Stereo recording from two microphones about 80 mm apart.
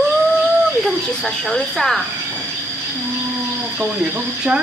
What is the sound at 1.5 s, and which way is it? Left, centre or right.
Speech, centre.